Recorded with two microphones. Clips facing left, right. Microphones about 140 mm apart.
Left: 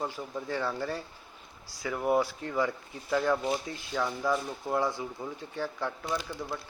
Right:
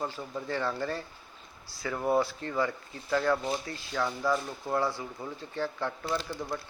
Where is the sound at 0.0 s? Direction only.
10° left (ahead or behind).